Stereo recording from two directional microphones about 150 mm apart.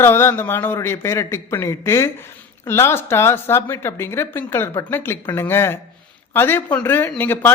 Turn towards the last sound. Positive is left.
turn(degrees=15)  # may be behind; listen again after turning